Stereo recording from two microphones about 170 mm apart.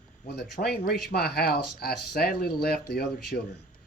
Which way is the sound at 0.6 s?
70° left (ahead or behind).